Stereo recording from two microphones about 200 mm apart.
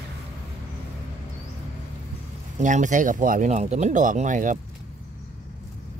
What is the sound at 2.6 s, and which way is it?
Speech, 40° right (ahead or behind).